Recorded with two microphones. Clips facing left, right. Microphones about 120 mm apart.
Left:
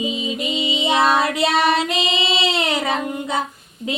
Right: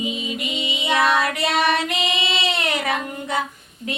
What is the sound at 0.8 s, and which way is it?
Child singing, 25° left (ahead or behind).